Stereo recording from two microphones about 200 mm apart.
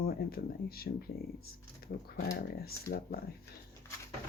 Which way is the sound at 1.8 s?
50° left (ahead or behind).